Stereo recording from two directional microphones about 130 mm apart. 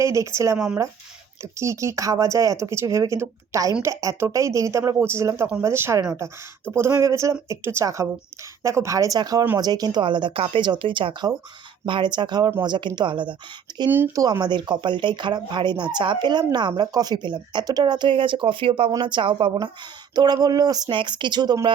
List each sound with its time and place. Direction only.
0.0 s speech: 20° right (ahead or behind)